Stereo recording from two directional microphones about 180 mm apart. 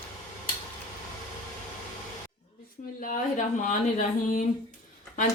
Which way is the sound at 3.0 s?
45° left (ahead or behind).